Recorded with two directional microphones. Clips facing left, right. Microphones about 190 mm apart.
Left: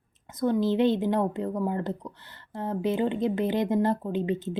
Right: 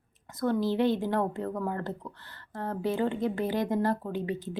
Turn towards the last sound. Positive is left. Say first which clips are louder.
# left 4 dB
turn(degrees=25)  # may be behind; listen again after turning